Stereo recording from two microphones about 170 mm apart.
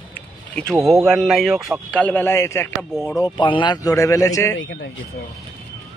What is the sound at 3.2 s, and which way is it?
A man's voice, 30° left (ahead or behind).